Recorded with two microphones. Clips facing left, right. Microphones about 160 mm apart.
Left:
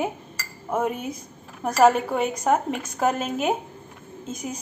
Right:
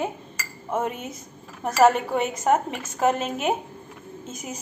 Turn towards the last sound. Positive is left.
turn(degrees=-5)  # may be behind; listen again after turning